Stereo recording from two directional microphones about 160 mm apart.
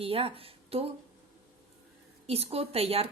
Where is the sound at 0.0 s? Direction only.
35° right (ahead or behind).